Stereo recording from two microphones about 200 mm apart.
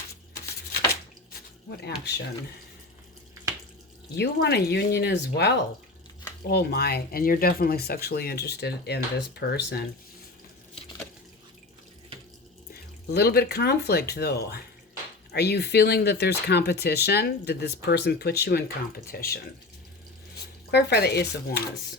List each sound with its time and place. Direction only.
1.7 s speech: 55° left (ahead or behind)
4.2 s speech: 55° left (ahead or behind)
13.1 s speech: 50° left (ahead or behind)
20.7 s speech: 55° left (ahead or behind)